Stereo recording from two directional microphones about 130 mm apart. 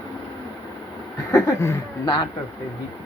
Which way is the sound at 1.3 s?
20° left (ahead or behind).